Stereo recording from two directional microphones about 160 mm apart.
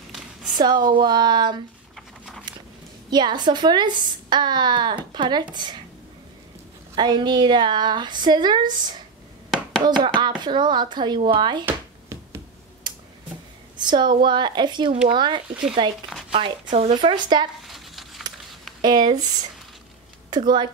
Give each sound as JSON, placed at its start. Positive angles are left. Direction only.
{"t": 0.1, "sound": "a sound", "side_deg": 0}
{"t": 0.6, "sound": "a woman's voice", "side_deg": -25}
{"t": 2.0, "sound": "a sound", "side_deg": 0}
{"t": 3.1, "sound": "a woman's voice", "side_deg": -25}
{"t": 7.0, "sound": "a woman's voice", "side_deg": -25}
{"t": 9.5, "sound": "chopping", "side_deg": 5}
{"t": 9.8, "sound": "a woman's voice", "side_deg": -30}
{"t": 11.6, "sound": "a sound", "side_deg": -15}
{"t": 12.9, "sound": "tick-tock", "side_deg": -25}
{"t": 13.7, "sound": "a woman's voice", "side_deg": -30}
{"t": 17.1, "sound": "a woman's voice", "side_deg": -30}
{"t": 17.6, "sound": "a sound", "side_deg": 0}
{"t": 18.8, "sound": "speech", "side_deg": -25}
{"t": 20.2, "sound": "speech", "side_deg": -25}